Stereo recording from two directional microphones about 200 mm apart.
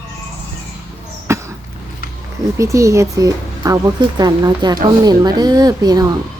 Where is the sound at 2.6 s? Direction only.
15° right (ahead or behind).